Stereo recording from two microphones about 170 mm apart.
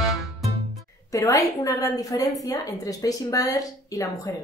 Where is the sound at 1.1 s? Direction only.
20° left (ahead or behind).